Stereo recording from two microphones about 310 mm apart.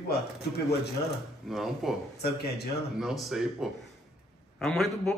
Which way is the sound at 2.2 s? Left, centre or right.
Left.